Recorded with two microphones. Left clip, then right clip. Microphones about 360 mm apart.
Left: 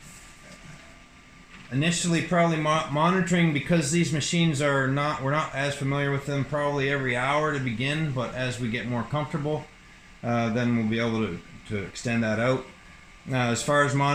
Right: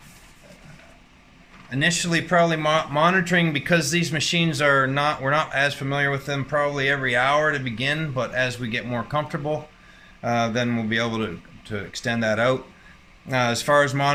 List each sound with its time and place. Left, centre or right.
1.8 s speech: right
10.2 s speech: right